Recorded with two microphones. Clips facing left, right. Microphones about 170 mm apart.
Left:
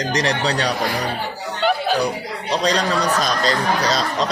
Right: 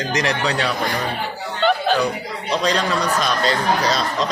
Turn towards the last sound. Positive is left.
turn(degrees=35)  # may be behind; listen again after turning